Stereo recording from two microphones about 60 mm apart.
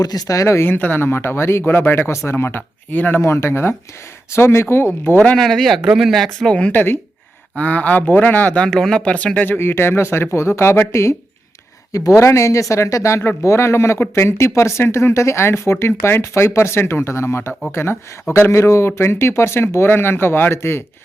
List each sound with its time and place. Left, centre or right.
0.0 s speech: left
0.7 s speech: left
2.0 s speech: left
3.2 s speech: left
5.4 s speech: centre
6.5 s speech: centre
6.7 s speech: left
7.5 s speech: left
8.5 s speech: centre
9.5 s speech: left
11.9 s speech: left
12.1 s speech: left
14.3 s speech: left